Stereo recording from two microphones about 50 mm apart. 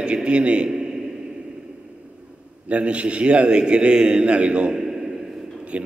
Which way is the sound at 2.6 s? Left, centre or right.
Right.